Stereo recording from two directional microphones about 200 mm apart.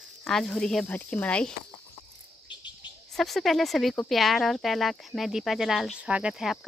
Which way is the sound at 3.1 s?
Centre (ahead or behind).